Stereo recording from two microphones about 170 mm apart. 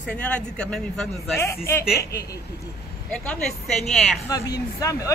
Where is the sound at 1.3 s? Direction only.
15° left (ahead or behind).